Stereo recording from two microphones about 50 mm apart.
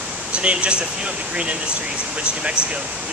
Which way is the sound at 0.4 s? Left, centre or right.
Right.